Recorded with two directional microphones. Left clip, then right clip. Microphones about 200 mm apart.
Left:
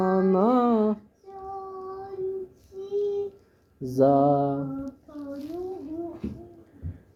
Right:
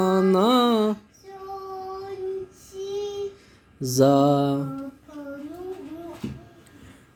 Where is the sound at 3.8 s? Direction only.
35° right (ahead or behind).